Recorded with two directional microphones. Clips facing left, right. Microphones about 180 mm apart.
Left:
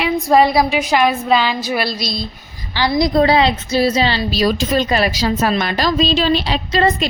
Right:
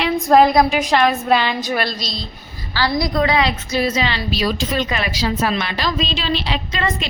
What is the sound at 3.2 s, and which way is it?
A woman's voice, 30° left (ahead or behind).